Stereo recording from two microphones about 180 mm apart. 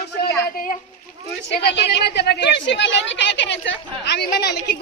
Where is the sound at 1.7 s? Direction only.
70° left (ahead or behind).